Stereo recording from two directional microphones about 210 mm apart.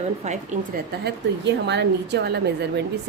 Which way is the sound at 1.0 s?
55° right (ahead or behind).